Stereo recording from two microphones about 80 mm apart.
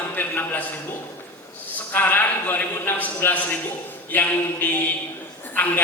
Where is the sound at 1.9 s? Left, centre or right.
Left.